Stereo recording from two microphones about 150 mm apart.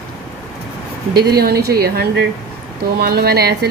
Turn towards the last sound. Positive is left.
turn(degrees=-90)